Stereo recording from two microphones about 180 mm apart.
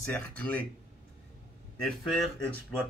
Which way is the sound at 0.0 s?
10° left (ahead or behind).